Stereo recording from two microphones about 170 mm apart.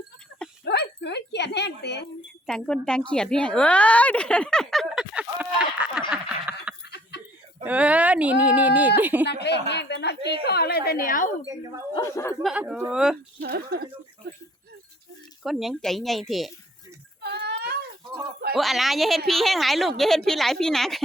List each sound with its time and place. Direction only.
0.6 s speech: 75° left (ahead or behind)
2.5 s a woman's voice: 5° left (ahead or behind)
6.1 s a sound: 5° right (ahead or behind)
7.6 s speech: 10° right (ahead or behind)
9.2 s a woman's voice: 90° left; by 11.3 s 50° left (ahead or behind)
11.9 s speech: 15° left (ahead or behind)
12.4 s a woman's voice: 5° right (ahead or behind)
13.4 s speech: 65° right (ahead or behind)
15.4 s a woman's voice: centre (ahead or behind)
17.2 s a sound: 75° right (ahead or behind)
18.5 s a woman's voice: centre (ahead or behind)